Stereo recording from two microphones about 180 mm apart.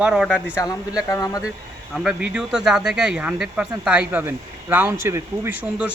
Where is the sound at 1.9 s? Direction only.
5° right (ahead or behind).